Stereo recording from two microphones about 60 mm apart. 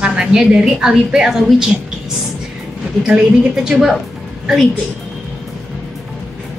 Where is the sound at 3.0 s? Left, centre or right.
Centre.